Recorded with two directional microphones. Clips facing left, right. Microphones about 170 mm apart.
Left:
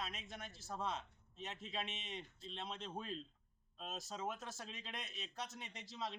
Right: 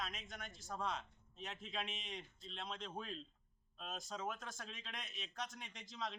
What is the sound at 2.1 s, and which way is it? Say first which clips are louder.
Speech: left 2 dB; 30° left (ahead or behind).